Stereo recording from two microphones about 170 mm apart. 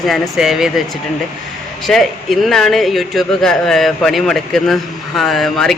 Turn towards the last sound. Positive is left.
turn(degrees=0)  # may be behind; listen again after turning